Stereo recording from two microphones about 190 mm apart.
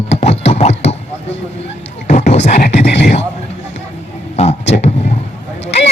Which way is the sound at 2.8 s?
60° left (ahead or behind).